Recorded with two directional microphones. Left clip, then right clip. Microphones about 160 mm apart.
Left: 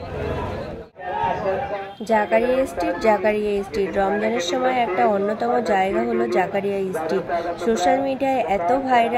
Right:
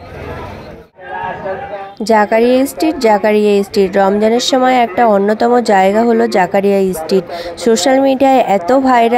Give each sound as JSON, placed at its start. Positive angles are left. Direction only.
{"t": 2.0, "sound": "a woman's voice", "side_deg": -75}